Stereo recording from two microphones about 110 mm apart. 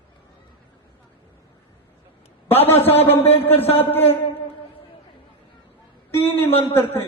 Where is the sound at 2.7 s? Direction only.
65° left (ahead or behind).